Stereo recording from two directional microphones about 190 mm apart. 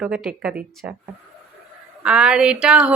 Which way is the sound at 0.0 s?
5° right (ahead or behind).